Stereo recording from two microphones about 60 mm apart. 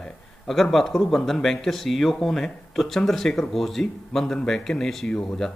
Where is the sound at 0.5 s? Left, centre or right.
Centre.